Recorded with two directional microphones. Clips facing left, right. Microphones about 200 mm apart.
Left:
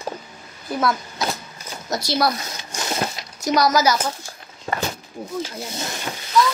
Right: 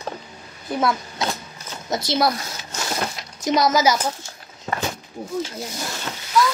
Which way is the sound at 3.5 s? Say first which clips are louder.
Even; 20° right (ahead or behind).